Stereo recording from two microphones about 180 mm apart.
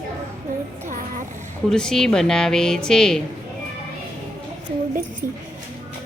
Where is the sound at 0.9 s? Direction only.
50° right (ahead or behind).